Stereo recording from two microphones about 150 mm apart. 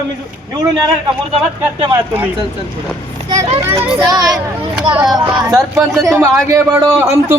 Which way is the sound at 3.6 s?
20° right (ahead or behind).